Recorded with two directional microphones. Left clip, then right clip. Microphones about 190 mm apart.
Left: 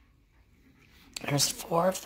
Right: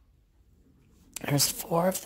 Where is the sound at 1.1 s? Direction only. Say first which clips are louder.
Right 1 dB; 25° right (ahead or behind).